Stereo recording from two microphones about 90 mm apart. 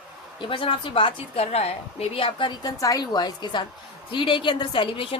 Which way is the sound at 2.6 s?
45° left (ahead or behind).